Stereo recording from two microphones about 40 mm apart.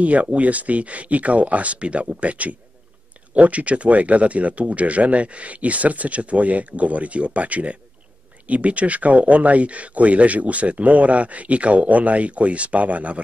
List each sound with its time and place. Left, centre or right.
0.0 s speech: right